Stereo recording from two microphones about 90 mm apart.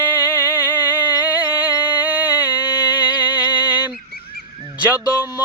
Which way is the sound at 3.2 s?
20° right (ahead or behind).